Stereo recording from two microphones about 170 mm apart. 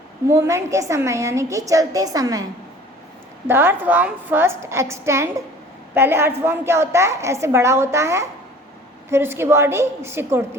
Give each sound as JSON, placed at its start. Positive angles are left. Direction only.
{"t": 0.3, "sound": "a woman's voice", "side_deg": -15}